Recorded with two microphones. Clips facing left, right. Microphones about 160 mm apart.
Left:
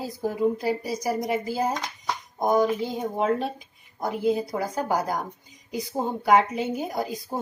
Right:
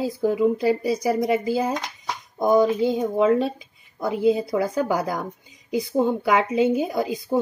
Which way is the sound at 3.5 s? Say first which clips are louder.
Right 2 dB; 25° right (ahead or behind).